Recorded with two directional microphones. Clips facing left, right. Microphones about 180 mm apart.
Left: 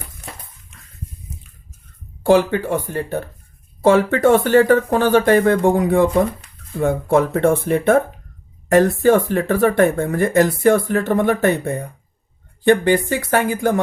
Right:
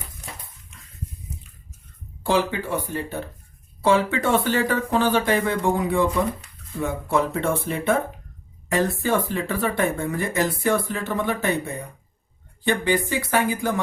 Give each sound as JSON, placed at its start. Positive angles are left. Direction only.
{"t": 2.2, "sound": "speech", "side_deg": 55}